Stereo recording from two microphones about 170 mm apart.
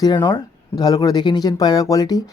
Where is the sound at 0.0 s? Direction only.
25° left (ahead or behind).